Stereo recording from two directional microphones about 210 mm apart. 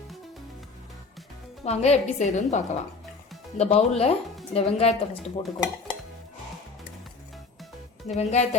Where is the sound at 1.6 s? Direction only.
30° left (ahead or behind).